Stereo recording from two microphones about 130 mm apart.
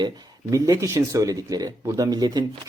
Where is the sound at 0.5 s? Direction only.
25° right (ahead or behind).